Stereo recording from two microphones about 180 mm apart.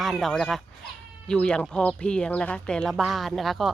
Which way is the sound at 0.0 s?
Centre (ahead or behind).